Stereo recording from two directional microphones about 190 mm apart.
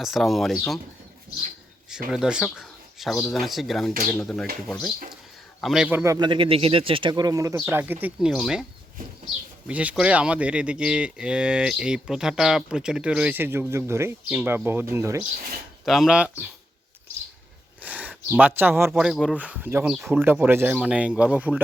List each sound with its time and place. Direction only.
0.0 s speech: centre (ahead or behind)
2.0 s speech: 5° right (ahead or behind)
5.5 s a man's voice: centre (ahead or behind)
9.6 s speech: 5° right (ahead or behind)
15.8 s speech: centre (ahead or behind)
17.7 s speech: 10° right (ahead or behind)